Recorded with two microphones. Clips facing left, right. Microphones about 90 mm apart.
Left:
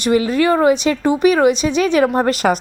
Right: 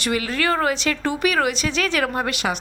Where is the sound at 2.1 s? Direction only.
40° left (ahead or behind).